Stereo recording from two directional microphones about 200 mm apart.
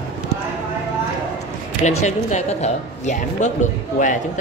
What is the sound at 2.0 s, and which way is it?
A man's voice, 35° left (ahead or behind).